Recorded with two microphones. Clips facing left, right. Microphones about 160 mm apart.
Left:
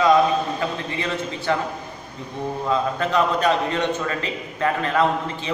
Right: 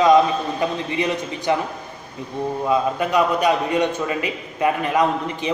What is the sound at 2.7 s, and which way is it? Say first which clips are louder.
A man's voice: right 2 dB; 10° right (ahead or behind).